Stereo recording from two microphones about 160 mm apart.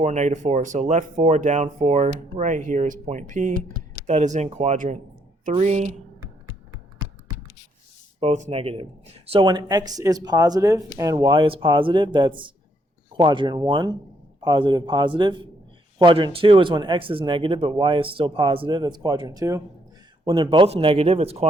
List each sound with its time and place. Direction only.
0.0 s speech: 45° right (ahead or behind)
8.2 s speech: 45° right (ahead or behind)
9.4 s speech: 25° right (ahead or behind)